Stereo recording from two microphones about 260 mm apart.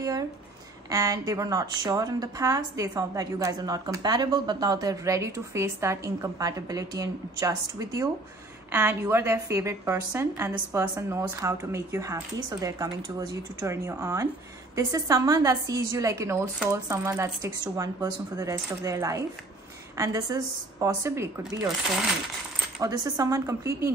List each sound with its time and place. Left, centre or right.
0.8 s a woman's voice: centre
22.8 s a woman's voice: centre